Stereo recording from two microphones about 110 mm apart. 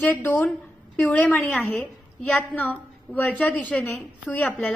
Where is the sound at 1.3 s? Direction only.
5° left (ahead or behind).